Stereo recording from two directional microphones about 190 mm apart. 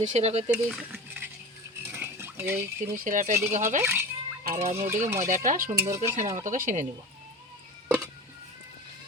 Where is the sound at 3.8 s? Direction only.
10° right (ahead or behind).